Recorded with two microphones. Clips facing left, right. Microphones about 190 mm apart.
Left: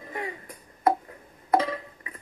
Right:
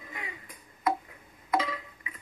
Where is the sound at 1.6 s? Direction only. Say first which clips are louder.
Left 5 dB; 40° left (ahead or behind).